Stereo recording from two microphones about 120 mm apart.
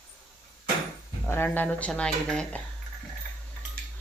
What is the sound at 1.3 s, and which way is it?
Speech, 15° left (ahead or behind).